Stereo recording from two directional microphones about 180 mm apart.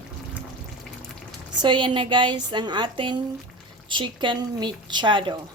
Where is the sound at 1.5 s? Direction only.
25° right (ahead or behind).